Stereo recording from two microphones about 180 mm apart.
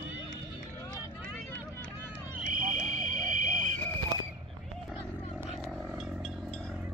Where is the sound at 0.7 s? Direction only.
20° left (ahead or behind).